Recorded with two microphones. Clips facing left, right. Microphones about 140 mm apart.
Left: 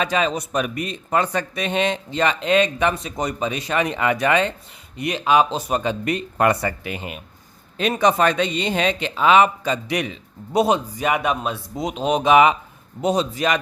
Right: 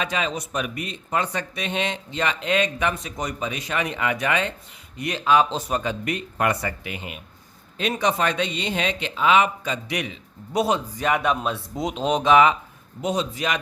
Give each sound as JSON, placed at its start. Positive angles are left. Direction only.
{"t": 0.0, "sound": "a man's voice", "side_deg": 40}
{"t": 4.9, "sound": "speech", "side_deg": 20}
{"t": 5.8, "sound": "a man's voice", "side_deg": 30}
{"t": 10.5, "sound": "speech", "side_deg": 25}
{"t": 10.9, "sound": "speech", "side_deg": 10}
{"t": 13.0, "sound": "a man's voice", "side_deg": 35}